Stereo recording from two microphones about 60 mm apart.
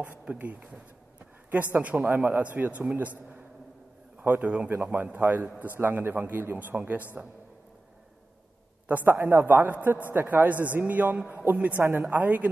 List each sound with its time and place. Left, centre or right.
0.2 s a man's voice: right
8.8 s a man's voice: right